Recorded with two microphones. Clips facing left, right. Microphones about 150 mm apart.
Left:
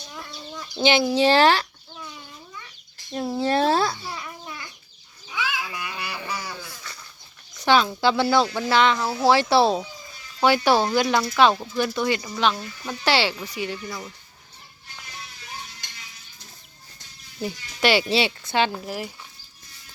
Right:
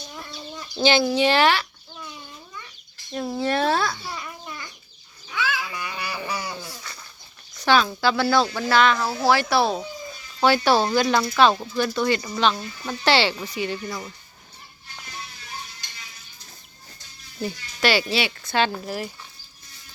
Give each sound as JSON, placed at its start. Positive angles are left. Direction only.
{"t": 0.2, "sound": "chicken", "side_deg": -5}
{"t": 0.8, "sound": "speech", "side_deg": 20}
{"t": 1.1, "sound": "speech", "side_deg": 35}
{"t": 3.4, "sound": "speech", "side_deg": 30}
{"t": 3.9, "sound": "a sound", "side_deg": 10}
{"t": 5.8, "sound": "a sound", "side_deg": 0}
{"t": 6.3, "sound": "a sound", "side_deg": -15}
{"t": 7.5, "sound": "speech", "side_deg": 20}
{"t": 10.4, "sound": "speech", "side_deg": 15}
{"t": 12.5, "sound": "speech", "side_deg": 0}
{"t": 13.1, "sound": "speech", "side_deg": 10}
{"t": 17.4, "sound": "speech", "side_deg": 20}